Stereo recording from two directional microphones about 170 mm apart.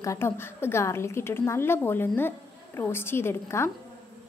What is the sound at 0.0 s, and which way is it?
A woman's voice, 15° left (ahead or behind).